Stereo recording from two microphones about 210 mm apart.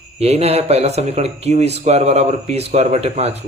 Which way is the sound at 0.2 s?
30° right (ahead or behind).